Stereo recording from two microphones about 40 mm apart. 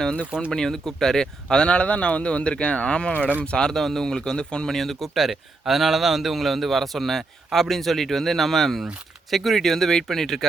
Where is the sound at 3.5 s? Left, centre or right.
Centre.